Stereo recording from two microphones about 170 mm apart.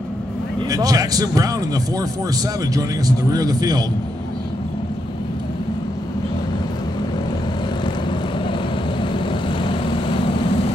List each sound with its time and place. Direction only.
0.7 s speech: 20° right (ahead or behind)
3.3 s speech: 20° right (ahead or behind)
9.0 s vehicle: 30° left (ahead or behind)